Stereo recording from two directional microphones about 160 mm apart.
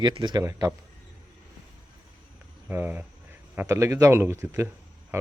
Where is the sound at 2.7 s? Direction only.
10° right (ahead or behind).